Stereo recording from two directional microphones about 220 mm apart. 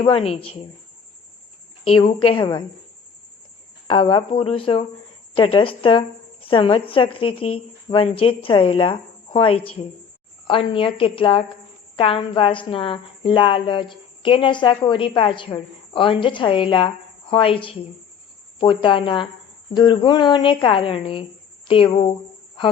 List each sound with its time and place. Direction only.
0.0 s a woman's voice: 25° left (ahead or behind)
2.2 s a woman's voice: 20° left (ahead or behind)
3.8 s a woman's voice: 20° left (ahead or behind)